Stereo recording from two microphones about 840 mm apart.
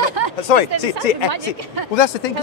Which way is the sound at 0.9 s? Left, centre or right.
Right.